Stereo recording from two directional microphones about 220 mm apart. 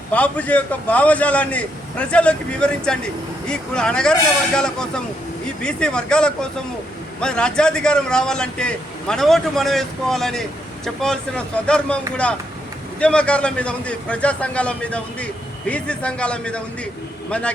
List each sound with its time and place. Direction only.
0.1 s a man's voice: 5° left (ahead or behind)
13.0 s a man's voice: 5° left (ahead or behind)